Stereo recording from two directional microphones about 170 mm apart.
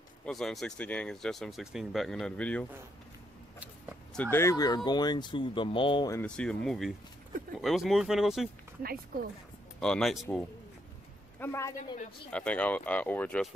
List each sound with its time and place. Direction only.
0.2 s speech: centre (ahead or behind)
4.1 s speech: 10° left (ahead or behind); by 6.1 s 30° left (ahead or behind)
6.1 s speech: 5° left (ahead or behind)
8.8 s speech: 60° right (ahead or behind)
9.8 s speech: 5° left (ahead or behind)
11.3 s a woman's voice: 15° left (ahead or behind)